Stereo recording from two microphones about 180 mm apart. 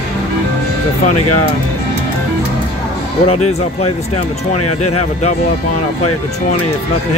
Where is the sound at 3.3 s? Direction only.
35° left (ahead or behind).